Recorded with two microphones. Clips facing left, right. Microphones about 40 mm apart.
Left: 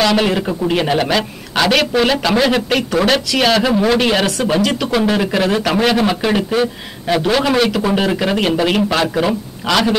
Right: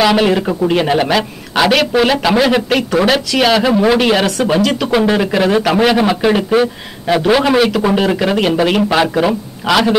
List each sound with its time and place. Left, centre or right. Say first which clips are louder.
0.0 s speech: right 3 dB; centre